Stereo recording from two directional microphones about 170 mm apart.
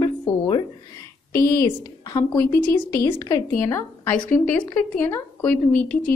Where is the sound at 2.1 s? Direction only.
20° left (ahead or behind).